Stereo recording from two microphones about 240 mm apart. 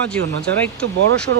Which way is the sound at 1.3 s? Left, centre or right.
Right.